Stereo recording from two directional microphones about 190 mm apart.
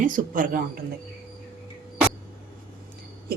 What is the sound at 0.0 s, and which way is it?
Speech, 45° right (ahead or behind).